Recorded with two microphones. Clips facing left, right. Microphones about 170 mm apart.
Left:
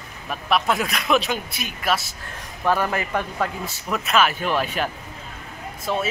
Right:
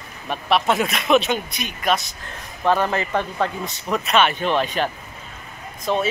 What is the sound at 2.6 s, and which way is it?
Speech, 20° right (ahead or behind).